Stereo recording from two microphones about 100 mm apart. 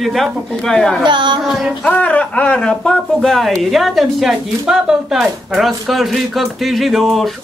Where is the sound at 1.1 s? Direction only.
50° right (ahead or behind).